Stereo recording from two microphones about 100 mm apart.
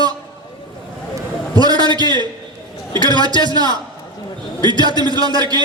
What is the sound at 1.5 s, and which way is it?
A man's voice, 40° right (ahead or behind).